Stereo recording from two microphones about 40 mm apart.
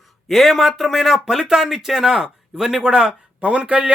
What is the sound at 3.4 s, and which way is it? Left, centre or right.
Speech, right.